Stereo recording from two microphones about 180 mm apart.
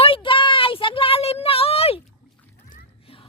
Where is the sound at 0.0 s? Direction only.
30° left (ahead or behind).